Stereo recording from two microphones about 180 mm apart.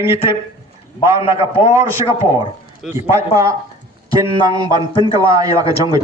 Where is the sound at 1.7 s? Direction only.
15° right (ahead or behind).